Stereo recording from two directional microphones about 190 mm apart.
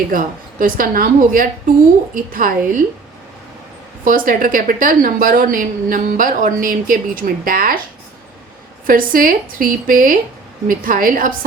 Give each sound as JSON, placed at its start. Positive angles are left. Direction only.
{"t": 0.1, "sound": "a woman's voice", "side_deg": -45}
{"t": 4.0, "sound": "a woman's voice", "side_deg": -45}
{"t": 8.9, "sound": "a woman's voice", "side_deg": -45}